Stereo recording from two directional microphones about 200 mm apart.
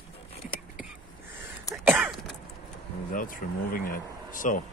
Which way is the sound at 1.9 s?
Centre (ahead or behind).